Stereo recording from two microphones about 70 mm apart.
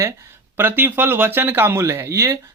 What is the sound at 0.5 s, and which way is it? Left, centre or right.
A man's voice, right.